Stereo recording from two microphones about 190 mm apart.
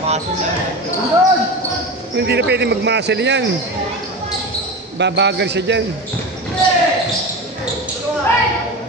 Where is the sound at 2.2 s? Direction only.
60° right (ahead or behind).